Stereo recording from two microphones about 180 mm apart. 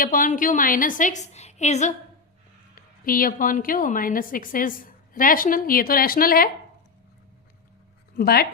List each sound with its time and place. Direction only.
0.0 s a woman's voice: 50° left (ahead or behind)
2.7 s a woman's voice: 50° left (ahead or behind)
8.1 s speech: 55° left (ahead or behind)